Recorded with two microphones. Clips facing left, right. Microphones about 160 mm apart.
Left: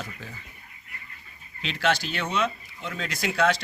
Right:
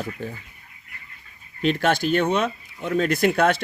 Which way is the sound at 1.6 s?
50° right (ahead or behind).